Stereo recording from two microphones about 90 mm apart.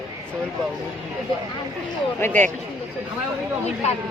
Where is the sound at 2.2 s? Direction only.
25° left (ahead or behind).